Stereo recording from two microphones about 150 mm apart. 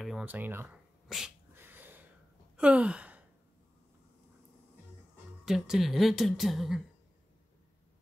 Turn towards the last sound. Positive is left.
turn(degrees=0)  # may be behind; listen again after turning